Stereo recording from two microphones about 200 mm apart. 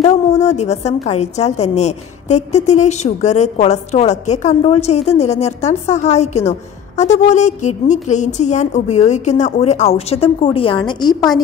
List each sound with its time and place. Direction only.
0.0 s a woman's voice: 35° left (ahead or behind)